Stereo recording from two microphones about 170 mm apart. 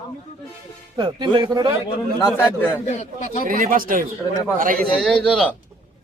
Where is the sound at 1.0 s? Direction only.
25° right (ahead or behind).